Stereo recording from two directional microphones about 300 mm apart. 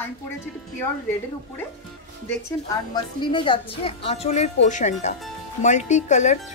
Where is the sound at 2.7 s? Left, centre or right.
Centre.